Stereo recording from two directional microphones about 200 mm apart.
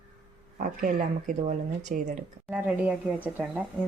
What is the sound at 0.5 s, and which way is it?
Speech, 40° right (ahead or behind).